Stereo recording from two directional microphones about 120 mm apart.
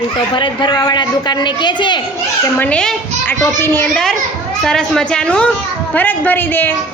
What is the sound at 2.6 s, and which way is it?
A woman's voice, 10° left (ahead or behind).